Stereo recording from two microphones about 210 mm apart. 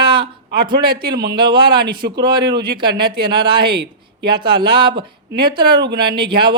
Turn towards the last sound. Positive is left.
turn(degrees=-25)  # may be behind; listen again after turning